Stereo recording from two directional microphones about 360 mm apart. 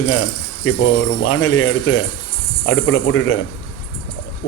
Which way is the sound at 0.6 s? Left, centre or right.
Left.